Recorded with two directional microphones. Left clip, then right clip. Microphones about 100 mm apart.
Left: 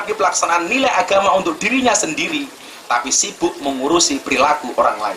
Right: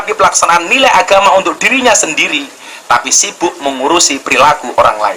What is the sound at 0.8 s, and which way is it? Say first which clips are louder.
Speech: right 8 dB; 15° left (ahead or behind).